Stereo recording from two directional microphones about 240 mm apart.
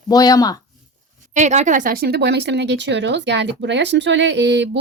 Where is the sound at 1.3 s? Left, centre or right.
Right.